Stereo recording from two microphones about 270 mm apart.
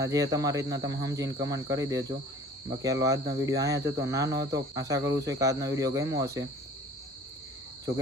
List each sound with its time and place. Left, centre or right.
0.0 s cricket: centre
0.7 s cricket: right
1.0 s cricket: centre